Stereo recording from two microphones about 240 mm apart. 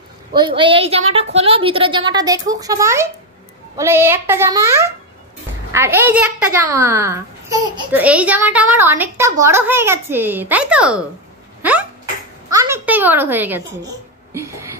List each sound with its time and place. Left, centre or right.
0.4 s a woman's voice: centre
11.6 s a sound: centre
12.4 s a child's voice: centre